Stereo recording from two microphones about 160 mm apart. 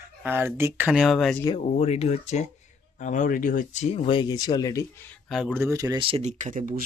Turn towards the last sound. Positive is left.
turn(degrees=-55)  # may be behind; listen again after turning